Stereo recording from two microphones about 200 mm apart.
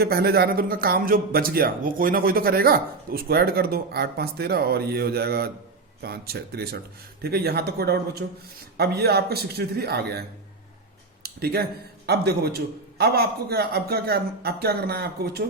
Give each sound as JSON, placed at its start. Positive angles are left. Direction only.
{"t": 0.0, "sound": "speech", "side_deg": -50}